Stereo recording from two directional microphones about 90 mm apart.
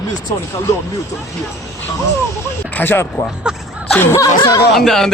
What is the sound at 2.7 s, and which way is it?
Speech, 25° left (ahead or behind).